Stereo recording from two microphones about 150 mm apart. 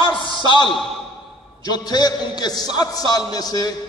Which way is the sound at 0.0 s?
35° left (ahead or behind).